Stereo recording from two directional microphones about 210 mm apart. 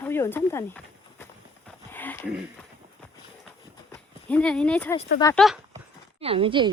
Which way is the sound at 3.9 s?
5° left (ahead or behind).